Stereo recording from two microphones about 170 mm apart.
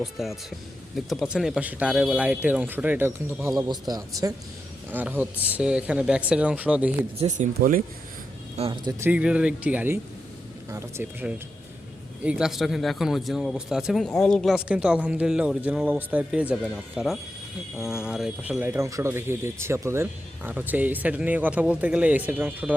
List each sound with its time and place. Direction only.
0.0 s speech: centre (ahead or behind); by 4.4 s 20° right (ahead or behind)
4.9 s speech: 10° right (ahead or behind)
7.2 s speech: 45° right (ahead or behind)
8.5 s speech: 30° right (ahead or behind)
9.0 s speech: 10° right (ahead or behind)